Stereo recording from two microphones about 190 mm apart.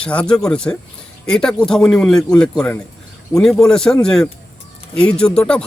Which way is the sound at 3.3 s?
20° left (ahead or behind).